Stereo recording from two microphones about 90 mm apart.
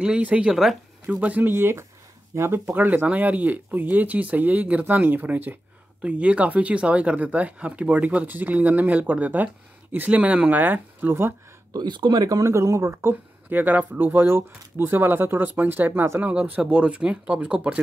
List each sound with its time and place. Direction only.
0.0 s speech: 10° right (ahead or behind)
1.2 s speech: 20° right (ahead or behind)
11.7 s speech: 55° right (ahead or behind); by 17.7 s 15° right (ahead or behind)